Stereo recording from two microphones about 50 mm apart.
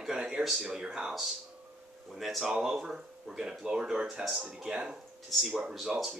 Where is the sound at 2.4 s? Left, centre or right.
Centre.